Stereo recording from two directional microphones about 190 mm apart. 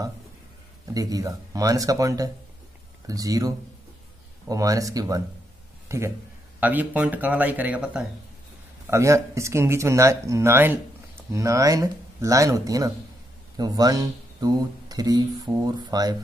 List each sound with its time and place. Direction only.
0.9 s a man's voice: 20° right (ahead or behind)